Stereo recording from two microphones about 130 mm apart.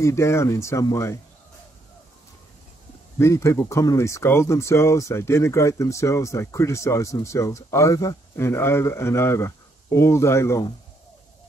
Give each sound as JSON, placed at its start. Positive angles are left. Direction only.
{"t": 0.0, "sound": "speech", "side_deg": 20}
{"t": 3.2, "sound": "speech", "side_deg": 20}